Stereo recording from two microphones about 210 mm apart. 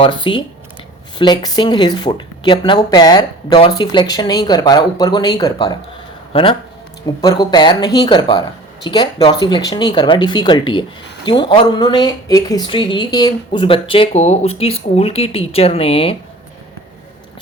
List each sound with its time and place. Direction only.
0.0 s speech: 25° left (ahead or behind)